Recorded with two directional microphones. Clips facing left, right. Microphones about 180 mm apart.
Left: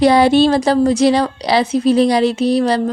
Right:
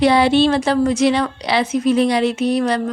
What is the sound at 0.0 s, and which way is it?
A woman's voice, 40° left (ahead or behind).